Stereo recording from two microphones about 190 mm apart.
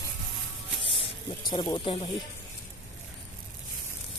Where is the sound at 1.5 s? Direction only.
25° left (ahead or behind).